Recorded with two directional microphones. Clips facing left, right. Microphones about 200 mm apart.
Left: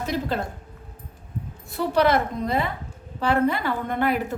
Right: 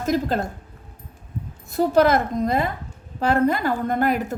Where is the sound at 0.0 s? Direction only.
45° right (ahead or behind).